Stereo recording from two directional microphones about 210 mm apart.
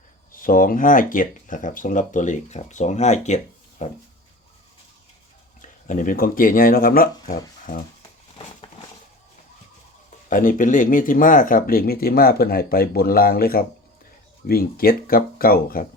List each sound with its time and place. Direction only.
0.3 s speech: 40° left (ahead or behind)
5.6 s speech: 40° left (ahead or behind)
10.2 s speech: 40° left (ahead or behind)